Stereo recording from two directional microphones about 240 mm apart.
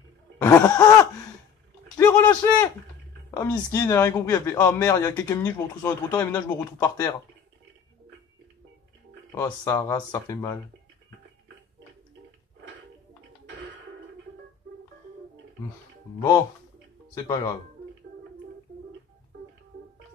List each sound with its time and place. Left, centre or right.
0.4 s cough: centre
0.7 s speech: centre
2.0 s a sound: centre
3.3 s speech: centre
9.3 s speech: centre